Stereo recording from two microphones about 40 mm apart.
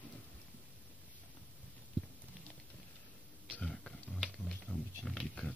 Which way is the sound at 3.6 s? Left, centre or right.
Centre.